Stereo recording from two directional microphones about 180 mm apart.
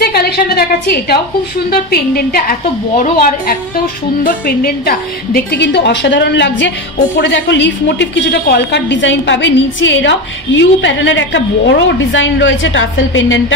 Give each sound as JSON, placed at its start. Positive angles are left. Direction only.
{"t": 0.0, "sound": "a woman's voice", "side_deg": 55}